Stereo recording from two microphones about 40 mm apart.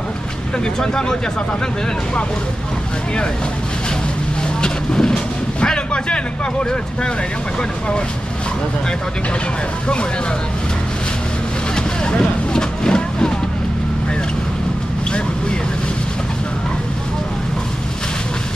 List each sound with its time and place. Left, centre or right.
0.7 s speech: centre
4.6 s vehicle: centre
5.6 s speech: left
11.7 s vehicle: centre